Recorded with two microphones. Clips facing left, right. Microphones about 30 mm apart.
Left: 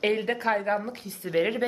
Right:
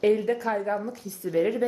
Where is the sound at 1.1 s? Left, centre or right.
Left.